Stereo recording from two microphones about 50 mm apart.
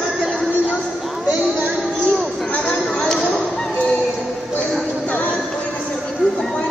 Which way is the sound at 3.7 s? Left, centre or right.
Left.